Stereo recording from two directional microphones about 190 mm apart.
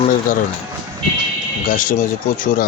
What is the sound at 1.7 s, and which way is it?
Speech, 45° left (ahead or behind).